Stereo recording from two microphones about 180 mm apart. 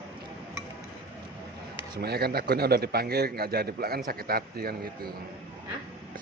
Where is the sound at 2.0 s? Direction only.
60° right (ahead or behind).